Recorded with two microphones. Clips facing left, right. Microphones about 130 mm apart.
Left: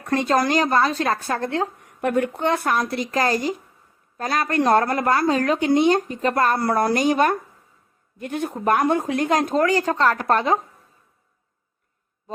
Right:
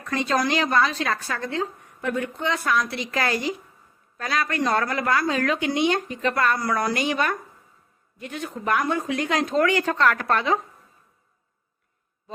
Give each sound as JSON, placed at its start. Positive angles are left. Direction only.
{"t": 0.0, "sound": "speech", "side_deg": 50}
{"t": 5.3, "sound": "speech", "side_deg": 35}